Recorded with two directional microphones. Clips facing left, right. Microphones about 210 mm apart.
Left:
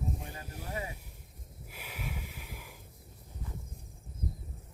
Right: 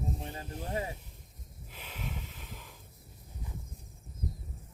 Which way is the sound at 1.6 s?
10° left (ahead or behind).